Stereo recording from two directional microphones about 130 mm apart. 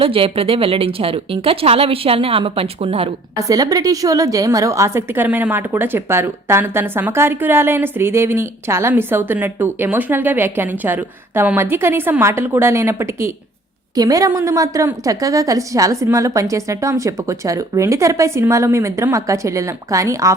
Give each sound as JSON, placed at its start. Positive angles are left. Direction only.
{"t": 0.0, "sound": "speech", "side_deg": -45}
{"t": 3.3, "sound": "a woman's voice", "side_deg": -25}